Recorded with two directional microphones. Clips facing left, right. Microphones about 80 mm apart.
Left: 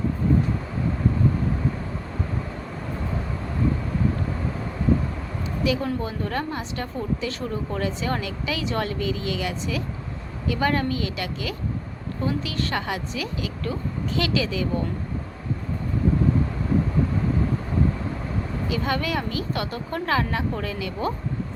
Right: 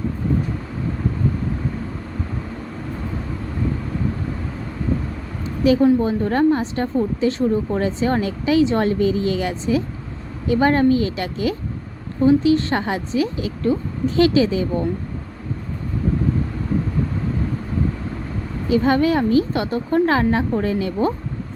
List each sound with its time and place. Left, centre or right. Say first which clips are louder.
5.8 s a woman's voice: right 11 dB; right
18.7 s a woman's voice: right 10 dB; right